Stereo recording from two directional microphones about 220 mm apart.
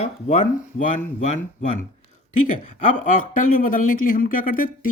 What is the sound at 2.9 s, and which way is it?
Speech, 35° left (ahead or behind).